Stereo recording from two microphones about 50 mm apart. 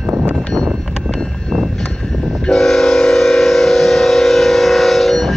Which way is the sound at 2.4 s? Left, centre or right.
Centre.